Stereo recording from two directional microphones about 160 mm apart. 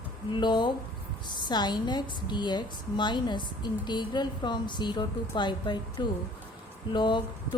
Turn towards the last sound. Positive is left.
turn(degrees=30)  # may be behind; listen again after turning